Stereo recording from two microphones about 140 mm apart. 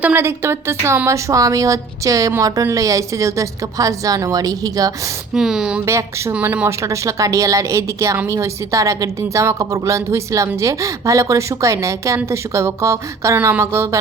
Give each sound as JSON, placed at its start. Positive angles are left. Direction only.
{"t": 0.0, "sound": "a woman's voice", "side_deg": -15}
{"t": 5.3, "sound": "speech", "side_deg": -5}
{"t": 5.8, "sound": "a woman's voice", "side_deg": -20}